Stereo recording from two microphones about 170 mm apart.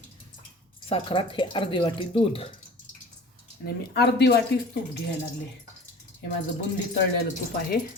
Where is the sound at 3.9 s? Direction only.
75° left (ahead or behind).